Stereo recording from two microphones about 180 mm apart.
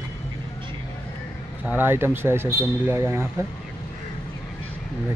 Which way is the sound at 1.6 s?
10° right (ahead or behind).